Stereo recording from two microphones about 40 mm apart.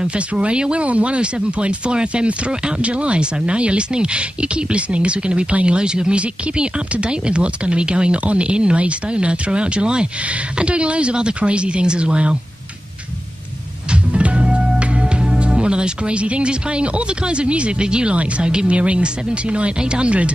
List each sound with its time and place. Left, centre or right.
0.3 s speech: right
14.1 s music: right
18.1 s speech: right